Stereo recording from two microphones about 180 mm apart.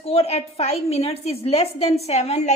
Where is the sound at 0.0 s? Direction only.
35° left (ahead or behind).